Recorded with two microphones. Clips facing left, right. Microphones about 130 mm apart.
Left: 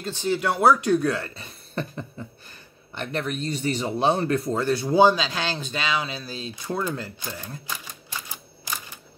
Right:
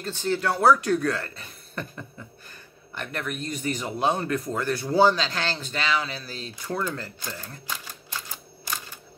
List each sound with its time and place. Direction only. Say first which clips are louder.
0.0 s speech: left 1 dB; 15° left (ahead or behind)
4.9 s speech: left 2 dB; 15° left (ahead or behind)